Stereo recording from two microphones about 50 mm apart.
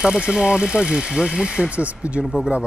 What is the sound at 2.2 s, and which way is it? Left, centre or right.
Speech, centre.